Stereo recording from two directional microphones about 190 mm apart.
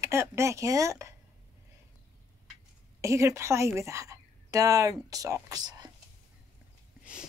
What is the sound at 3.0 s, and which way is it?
A woman's voice, 15° right (ahead or behind).